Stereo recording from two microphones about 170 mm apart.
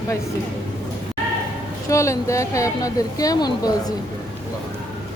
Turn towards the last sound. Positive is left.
turn(degrees=20)  # may be behind; listen again after turning